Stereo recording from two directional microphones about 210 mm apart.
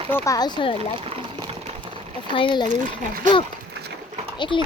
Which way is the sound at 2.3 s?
25° left (ahead or behind).